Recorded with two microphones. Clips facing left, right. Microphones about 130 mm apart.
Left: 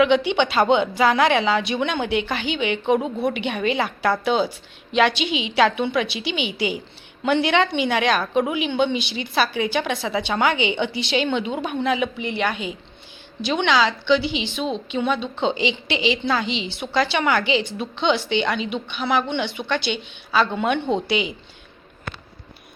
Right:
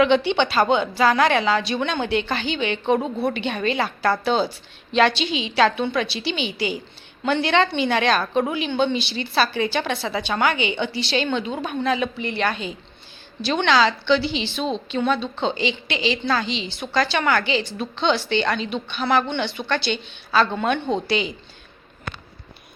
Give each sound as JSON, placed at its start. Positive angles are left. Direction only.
{"t": 0.0, "sound": "a woman's voice", "side_deg": 10}